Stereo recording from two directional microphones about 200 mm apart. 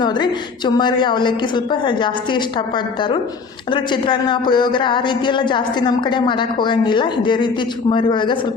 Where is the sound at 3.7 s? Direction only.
25° left (ahead or behind).